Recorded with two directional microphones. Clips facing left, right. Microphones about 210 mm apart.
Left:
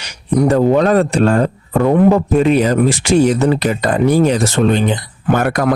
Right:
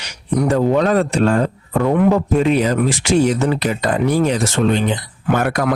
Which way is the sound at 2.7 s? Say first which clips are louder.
Left 3 dB; 40° left (ahead or behind).